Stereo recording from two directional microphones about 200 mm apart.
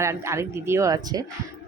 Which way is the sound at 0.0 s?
15° right (ahead or behind).